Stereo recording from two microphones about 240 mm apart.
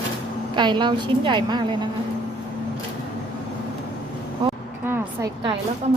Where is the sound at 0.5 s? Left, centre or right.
Centre.